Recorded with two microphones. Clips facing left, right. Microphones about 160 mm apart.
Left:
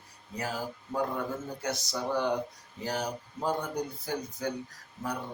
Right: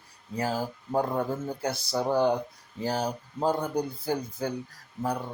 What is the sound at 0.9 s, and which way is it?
Speech, 30° right (ahead or behind).